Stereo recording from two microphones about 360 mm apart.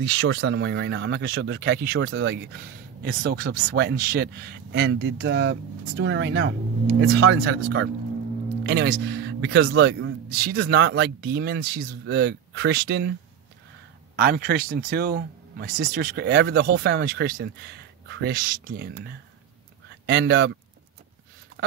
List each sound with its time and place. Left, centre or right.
0.0 s speech: right
14.1 s speech: right